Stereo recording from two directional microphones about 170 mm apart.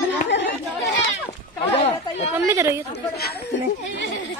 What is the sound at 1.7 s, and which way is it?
Speech, 40° left (ahead or behind).